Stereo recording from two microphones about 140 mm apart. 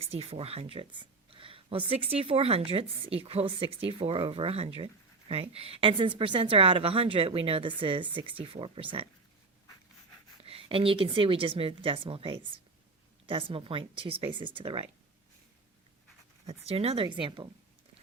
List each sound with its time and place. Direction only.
0.0 s a woman's voice: 45° right (ahead or behind)
10.4 s a woman's voice: 40° right (ahead or behind)
16.5 s a woman's voice: 45° right (ahead or behind)